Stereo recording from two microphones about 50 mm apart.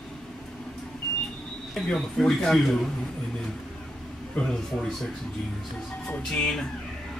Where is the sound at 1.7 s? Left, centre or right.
Centre.